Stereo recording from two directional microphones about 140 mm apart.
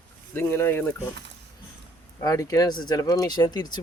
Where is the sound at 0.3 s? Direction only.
15° left (ahead or behind).